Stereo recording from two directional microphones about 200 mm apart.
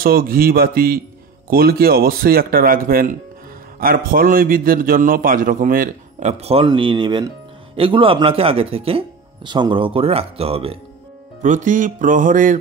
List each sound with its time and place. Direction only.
0.0 s a man's voice: 45° right (ahead or behind); by 10.8 s 30° right (ahead or behind)
11.4 s music: 40° right (ahead or behind)